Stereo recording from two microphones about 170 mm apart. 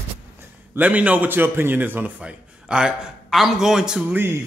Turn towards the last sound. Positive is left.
turn(degrees=-10)  # may be behind; listen again after turning